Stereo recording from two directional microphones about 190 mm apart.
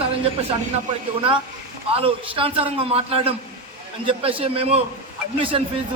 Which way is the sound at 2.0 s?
30° right (ahead or behind).